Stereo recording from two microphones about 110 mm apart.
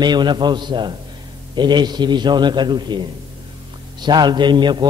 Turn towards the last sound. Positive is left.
turn(degrees=-45)  # may be behind; listen again after turning